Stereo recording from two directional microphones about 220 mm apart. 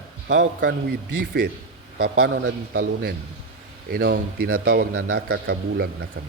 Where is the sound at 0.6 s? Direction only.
45° right (ahead or behind).